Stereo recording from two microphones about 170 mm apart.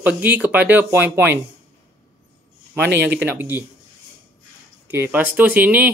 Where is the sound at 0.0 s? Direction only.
10° right (ahead or behind).